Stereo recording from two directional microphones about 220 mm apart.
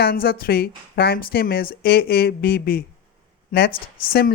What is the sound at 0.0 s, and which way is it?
Speech, 45° left (ahead or behind).